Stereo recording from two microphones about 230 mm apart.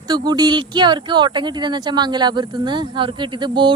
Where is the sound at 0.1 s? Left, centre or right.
Centre.